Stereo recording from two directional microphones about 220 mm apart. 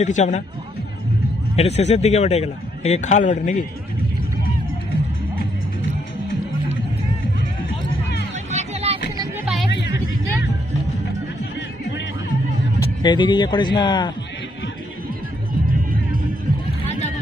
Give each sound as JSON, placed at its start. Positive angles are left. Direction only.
{"t": 0.0, "sound": "a man's voice", "side_deg": 35}
{"t": 1.5, "sound": "a man's voice", "side_deg": 30}
{"t": 8.4, "sound": "music", "side_deg": -30}
{"t": 13.0, "sound": "speech", "side_deg": 20}